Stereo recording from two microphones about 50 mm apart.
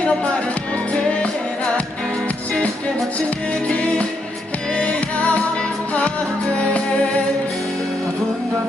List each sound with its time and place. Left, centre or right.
0.9 s music: left
3.2 s music: left